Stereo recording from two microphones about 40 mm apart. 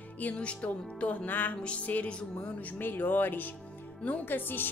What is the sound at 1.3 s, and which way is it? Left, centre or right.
Music, left.